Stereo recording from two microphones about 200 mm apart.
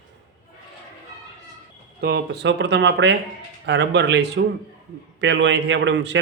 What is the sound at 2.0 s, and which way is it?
A man's voice, 55° right (ahead or behind).